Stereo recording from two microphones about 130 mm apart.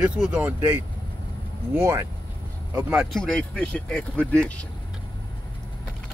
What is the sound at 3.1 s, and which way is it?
Speech, 5° left (ahead or behind).